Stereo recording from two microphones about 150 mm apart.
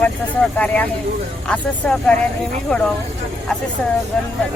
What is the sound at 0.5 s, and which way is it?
Speech, 10° left (ahead or behind).